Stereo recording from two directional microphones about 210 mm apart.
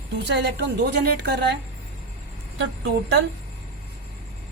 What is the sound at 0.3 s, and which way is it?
A woman's voice, 55° right (ahead or behind).